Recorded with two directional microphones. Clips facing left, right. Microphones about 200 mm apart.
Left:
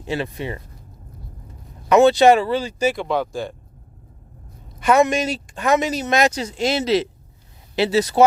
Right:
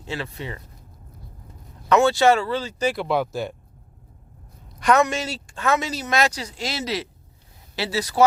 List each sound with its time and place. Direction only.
0.0 s speech: 15° left (ahead or behind)
1.9 s speech: 20° left (ahead or behind)
2.9 s speech: 5° right (ahead or behind)
4.8 s a woman's voice: 5° left (ahead or behind); by 8.2 s 25° left (ahead or behind)